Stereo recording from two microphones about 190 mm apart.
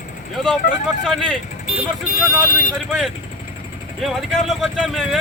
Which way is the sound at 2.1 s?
50° left (ahead or behind).